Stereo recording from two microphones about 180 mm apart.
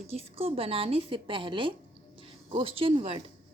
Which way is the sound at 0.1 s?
35° right (ahead or behind).